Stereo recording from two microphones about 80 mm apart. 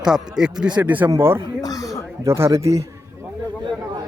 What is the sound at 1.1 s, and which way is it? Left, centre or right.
Speech, right.